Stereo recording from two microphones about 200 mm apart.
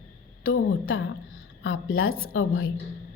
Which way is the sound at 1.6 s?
80° left.